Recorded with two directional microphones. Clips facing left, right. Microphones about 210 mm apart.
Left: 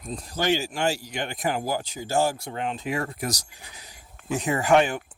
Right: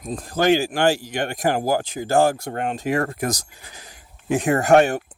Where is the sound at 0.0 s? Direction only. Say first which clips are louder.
Right 7 dB; 50° right (ahead or behind).